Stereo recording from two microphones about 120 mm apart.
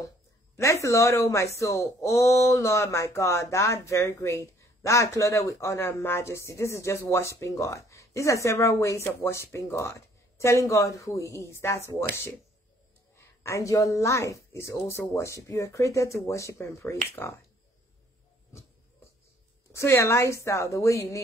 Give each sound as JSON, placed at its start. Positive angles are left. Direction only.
{"t": 0.6, "sound": "speech", "side_deg": 25}
{"t": 13.4, "sound": "speech", "side_deg": 25}
{"t": 19.7, "sound": "speech", "side_deg": 25}